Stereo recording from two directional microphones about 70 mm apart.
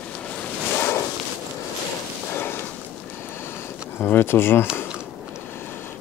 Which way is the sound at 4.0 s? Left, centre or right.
Left.